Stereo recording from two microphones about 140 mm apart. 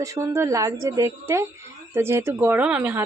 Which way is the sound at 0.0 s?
20° right (ahead or behind).